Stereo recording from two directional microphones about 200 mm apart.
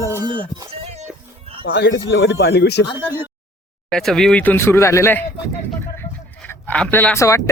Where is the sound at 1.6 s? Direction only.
55° left (ahead or behind).